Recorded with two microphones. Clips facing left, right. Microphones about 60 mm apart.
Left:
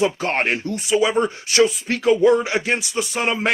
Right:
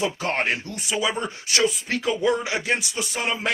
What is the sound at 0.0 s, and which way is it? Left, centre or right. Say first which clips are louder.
Speech: left 4 dB; left.